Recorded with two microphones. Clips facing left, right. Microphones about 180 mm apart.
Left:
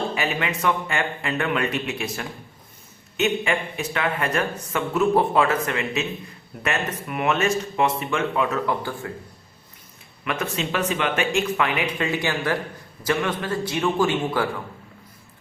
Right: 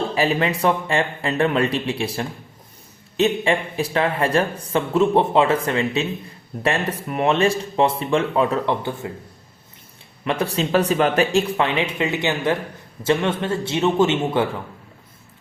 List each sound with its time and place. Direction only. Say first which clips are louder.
0.1 s speech: right 6 dB; 35° right (ahead or behind)
10.2 s a man's voice: right 5 dB; 35° right (ahead or behind)